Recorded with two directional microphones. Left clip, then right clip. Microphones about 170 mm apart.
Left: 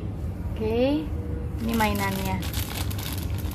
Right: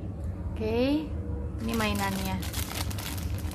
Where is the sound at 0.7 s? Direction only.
5° right (ahead or behind).